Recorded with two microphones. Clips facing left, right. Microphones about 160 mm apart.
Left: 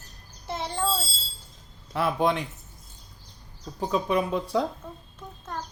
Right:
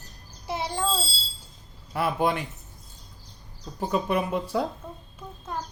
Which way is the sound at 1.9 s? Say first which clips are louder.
Left 1 dB; 5° right (ahead or behind).